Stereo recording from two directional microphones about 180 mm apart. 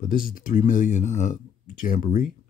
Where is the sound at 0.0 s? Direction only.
50° left (ahead or behind).